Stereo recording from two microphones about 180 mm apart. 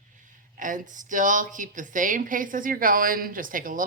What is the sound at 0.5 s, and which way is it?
A woman's voice, 45° right (ahead or behind).